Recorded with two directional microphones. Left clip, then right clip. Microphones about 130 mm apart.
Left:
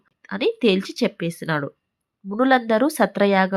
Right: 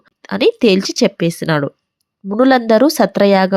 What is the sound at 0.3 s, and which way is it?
Speech, 45° right (ahead or behind).